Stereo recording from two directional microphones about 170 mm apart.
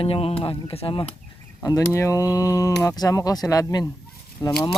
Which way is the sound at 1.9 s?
15° left (ahead or behind).